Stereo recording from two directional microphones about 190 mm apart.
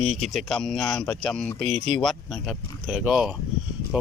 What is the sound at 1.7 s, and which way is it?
Speech, 35° right (ahead or behind).